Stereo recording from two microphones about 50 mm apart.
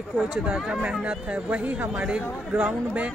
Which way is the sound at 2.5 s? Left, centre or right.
Right.